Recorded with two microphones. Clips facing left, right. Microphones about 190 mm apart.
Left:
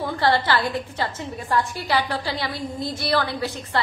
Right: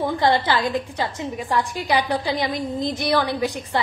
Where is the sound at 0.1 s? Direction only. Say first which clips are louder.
Left 2 dB; 15° right (ahead or behind).